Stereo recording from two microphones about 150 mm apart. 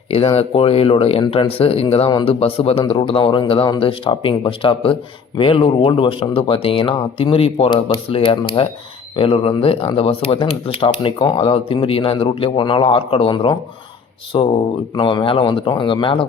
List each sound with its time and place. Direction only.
0.1 s speech: 40° left (ahead or behind)